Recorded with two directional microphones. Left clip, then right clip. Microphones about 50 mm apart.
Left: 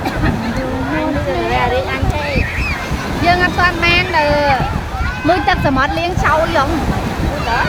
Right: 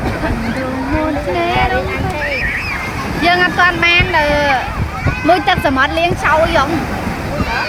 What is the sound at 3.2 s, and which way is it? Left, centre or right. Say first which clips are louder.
Vehicle: right 2 dB; right.